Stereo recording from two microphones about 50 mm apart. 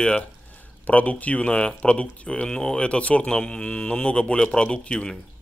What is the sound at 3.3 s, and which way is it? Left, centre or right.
Speech, centre.